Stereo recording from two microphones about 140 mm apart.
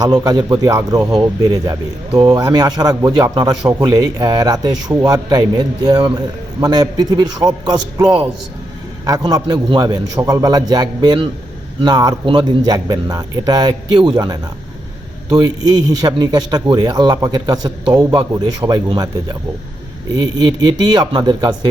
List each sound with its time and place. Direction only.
0.0 s speech: 30° right (ahead or behind)
3.7 s a man's voice: 15° right (ahead or behind)
3.9 s speech: 30° right (ahead or behind)